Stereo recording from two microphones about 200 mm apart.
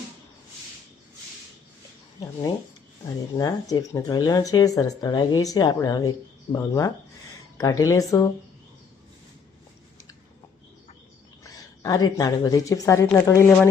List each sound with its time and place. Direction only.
3.3 s speech: 20° left (ahead or behind)
11.4 s a woman's voice: 15° left (ahead or behind)